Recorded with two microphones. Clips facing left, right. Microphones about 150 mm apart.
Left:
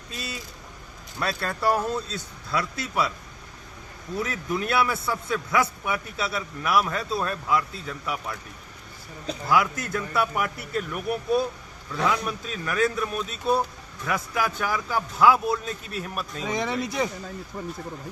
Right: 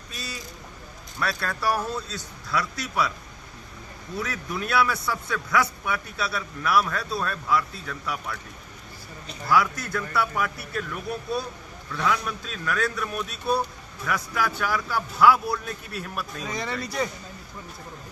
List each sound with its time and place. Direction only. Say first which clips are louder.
0.1 s a man's voice: left 2 dB; 25° left (ahead or behind)
4.2 s a man's voice: left 3 dB; 25° left (ahead or behind)
9.5 s a man's voice: even; 20° left (ahead or behind)
14.1 s a man's voice: left 1 dB; 20° left (ahead or behind)
16.8 s speech: left 2 dB; centre (ahead or behind)